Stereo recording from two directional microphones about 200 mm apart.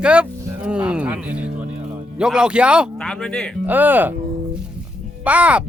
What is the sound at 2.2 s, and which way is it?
Speech, 5° right (ahead or behind).